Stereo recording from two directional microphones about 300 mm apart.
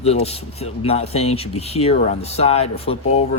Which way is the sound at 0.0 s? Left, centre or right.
Left.